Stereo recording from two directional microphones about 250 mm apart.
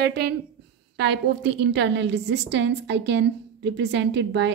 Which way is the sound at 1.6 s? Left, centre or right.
Right.